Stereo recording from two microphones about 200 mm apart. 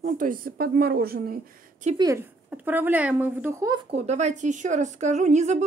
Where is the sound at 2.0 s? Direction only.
15° right (ahead or behind).